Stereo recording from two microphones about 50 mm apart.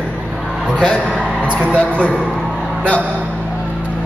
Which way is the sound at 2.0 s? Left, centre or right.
Left.